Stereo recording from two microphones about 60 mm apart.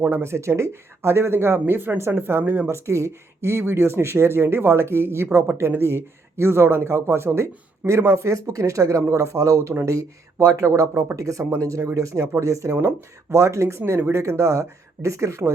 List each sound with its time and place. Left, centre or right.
0.0 s speech: right
2.6 s speech: right